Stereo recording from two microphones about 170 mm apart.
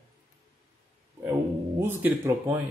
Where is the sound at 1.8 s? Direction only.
15° right (ahead or behind).